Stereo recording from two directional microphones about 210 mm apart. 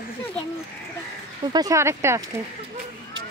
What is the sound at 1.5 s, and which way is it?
Speech, 15° right (ahead or behind).